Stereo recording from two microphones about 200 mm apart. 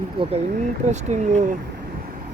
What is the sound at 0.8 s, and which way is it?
Speech, 35° right (ahead or behind).